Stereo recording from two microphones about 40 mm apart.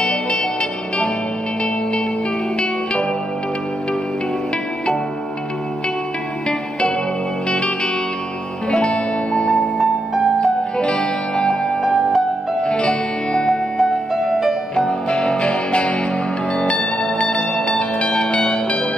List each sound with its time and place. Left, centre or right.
0.0 s music: left
7.4 s music: left
8.6 s music: centre
15.4 s music: left
17.0 s music: left
17.4 s music: centre